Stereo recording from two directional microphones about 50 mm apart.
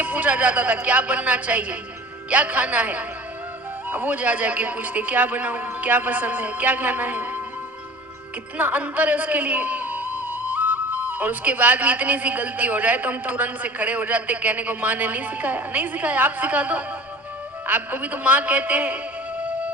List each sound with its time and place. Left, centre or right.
0.0 s a woman's voice: right
8.5 s a man's voice: right
19.4 s music: right